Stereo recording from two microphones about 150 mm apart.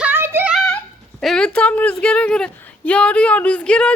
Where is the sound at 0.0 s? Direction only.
15° right (ahead or behind).